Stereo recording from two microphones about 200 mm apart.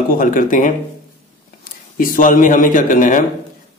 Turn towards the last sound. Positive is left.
turn(degrees=40)  # may be behind; listen again after turning